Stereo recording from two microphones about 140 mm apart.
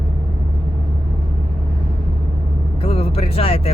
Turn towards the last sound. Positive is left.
turn(degrees=45)  # may be behind; listen again after turning